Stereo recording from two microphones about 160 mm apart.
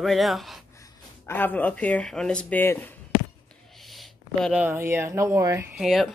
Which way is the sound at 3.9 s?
5° right (ahead or behind).